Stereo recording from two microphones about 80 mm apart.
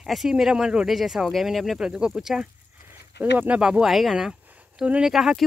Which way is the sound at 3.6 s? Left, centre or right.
Centre.